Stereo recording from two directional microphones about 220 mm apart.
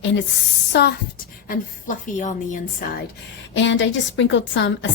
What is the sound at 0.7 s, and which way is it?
Speech, 50° left (ahead or behind).